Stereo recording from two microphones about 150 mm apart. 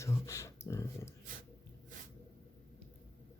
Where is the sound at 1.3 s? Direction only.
60° right (ahead or behind).